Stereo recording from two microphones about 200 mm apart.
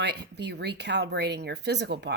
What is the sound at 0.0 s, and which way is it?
Speech, 55° right (ahead or behind).